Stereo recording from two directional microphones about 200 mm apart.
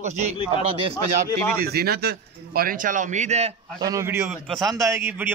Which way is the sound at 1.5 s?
50° right (ahead or behind).